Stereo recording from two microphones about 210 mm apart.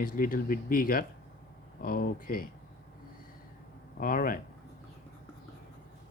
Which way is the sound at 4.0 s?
40° left (ahead or behind).